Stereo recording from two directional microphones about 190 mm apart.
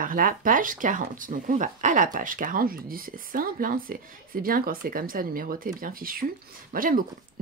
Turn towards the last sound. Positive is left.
turn(degrees=-45)  # may be behind; listen again after turning